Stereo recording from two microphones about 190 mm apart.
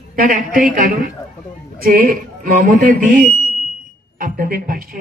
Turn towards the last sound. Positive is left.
turn(degrees=-50)  # may be behind; listen again after turning